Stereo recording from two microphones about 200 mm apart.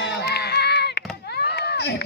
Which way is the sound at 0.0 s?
55° left (ahead or behind).